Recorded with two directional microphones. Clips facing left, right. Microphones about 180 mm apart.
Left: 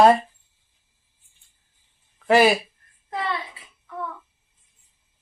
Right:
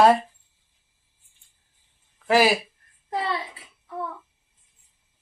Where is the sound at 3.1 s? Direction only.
30° right (ahead or behind).